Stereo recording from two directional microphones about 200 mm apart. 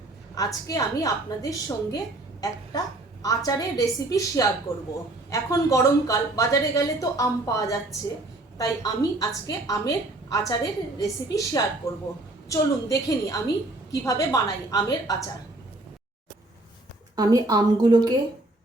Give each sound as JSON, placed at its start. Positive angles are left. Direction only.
{"t": 0.3, "sound": "a woman's voice", "side_deg": 15}
{"t": 3.2, "sound": "a woman's voice", "side_deg": 15}
{"t": 17.2, "sound": "a woman's voice", "side_deg": -20}